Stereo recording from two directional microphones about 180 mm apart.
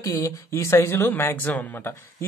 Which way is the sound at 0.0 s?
20° left (ahead or behind).